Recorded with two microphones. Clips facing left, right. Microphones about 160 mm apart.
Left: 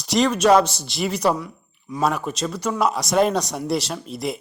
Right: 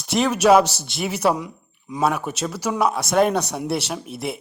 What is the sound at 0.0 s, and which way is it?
Speech, centre (ahead or behind).